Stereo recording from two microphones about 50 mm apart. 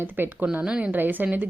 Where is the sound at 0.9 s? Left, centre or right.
Right.